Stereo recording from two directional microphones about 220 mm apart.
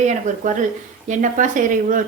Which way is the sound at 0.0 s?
35° right (ahead or behind).